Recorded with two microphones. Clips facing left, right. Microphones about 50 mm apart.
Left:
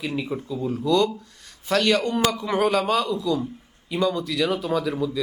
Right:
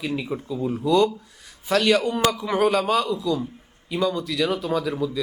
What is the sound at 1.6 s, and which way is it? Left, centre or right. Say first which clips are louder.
A man's voice: right 1 dB; centre.